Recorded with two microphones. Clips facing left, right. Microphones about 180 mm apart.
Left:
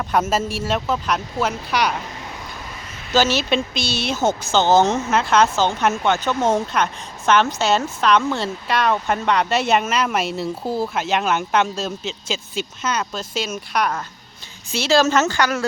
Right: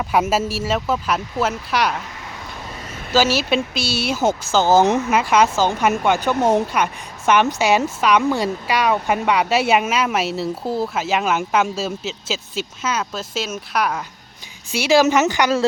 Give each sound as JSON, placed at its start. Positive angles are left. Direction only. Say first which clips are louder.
{"t": 0.0, "sound": "speech", "louder": "right 1 dB", "side_deg": -10}
{"t": 3.1, "sound": "a woman's voice", "louder": "right 1 dB", "side_deg": -10}